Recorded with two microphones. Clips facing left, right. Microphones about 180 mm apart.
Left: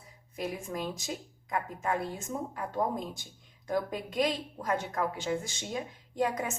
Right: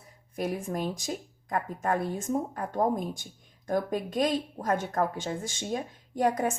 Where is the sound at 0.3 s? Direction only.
50° right (ahead or behind).